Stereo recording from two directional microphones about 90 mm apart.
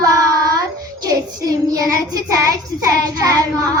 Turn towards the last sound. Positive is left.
turn(degrees=-40)  # may be behind; listen again after turning